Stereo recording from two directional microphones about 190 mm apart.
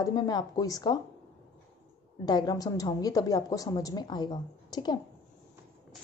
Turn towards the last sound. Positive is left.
turn(degrees=20)  # may be behind; listen again after turning